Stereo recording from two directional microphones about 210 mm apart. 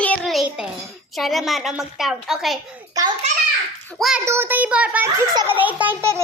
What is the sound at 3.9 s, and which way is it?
Speech, centre (ahead or behind).